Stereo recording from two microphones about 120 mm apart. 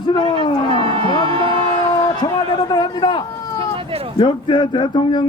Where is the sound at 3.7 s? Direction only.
50° right (ahead or behind).